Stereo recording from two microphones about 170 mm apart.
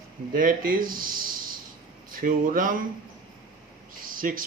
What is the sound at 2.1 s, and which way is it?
Speech, 55° right (ahead or behind).